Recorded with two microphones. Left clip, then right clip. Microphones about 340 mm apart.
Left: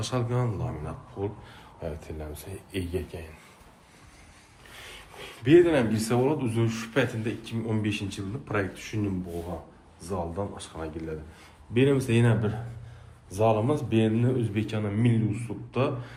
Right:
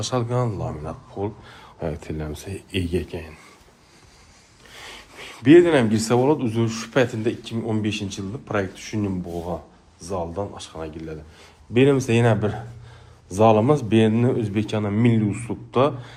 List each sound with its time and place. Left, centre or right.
0.0 s a man's voice: centre
4.8 s a man's voice: centre
10.0 s a man's voice: centre
11.7 s a man's voice: centre